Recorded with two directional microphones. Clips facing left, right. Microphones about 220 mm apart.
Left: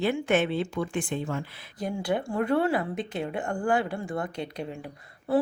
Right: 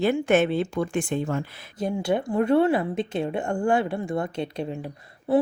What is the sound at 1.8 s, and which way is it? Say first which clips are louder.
Speech: right 4 dB; 25° right (ahead or behind).